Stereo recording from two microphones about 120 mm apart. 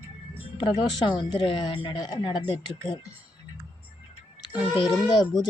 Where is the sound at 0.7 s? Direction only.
40° left (ahead or behind).